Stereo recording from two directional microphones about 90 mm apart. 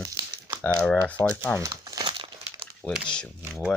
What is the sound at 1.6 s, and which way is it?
Crumpling, 40° right (ahead or behind).